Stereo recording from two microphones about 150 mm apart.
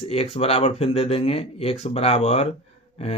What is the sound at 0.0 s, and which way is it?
Speech, 45° left (ahead or behind).